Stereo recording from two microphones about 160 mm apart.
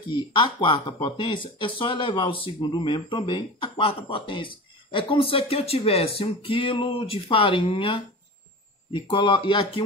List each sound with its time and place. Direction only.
0.1 s speech: 30° left (ahead or behind)